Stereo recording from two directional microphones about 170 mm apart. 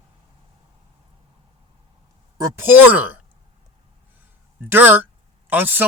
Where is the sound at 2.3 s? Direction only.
15° right (ahead or behind).